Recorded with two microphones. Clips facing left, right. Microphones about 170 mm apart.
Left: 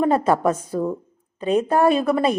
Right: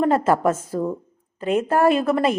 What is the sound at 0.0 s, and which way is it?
A woman's voice, 15° left (ahead or behind).